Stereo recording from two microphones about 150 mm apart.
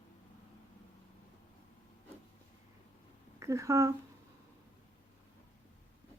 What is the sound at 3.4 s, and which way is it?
Speech, 20° right (ahead or behind).